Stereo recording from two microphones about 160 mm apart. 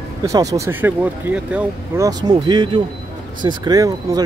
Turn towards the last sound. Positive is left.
turn(degrees=-25)  # may be behind; listen again after turning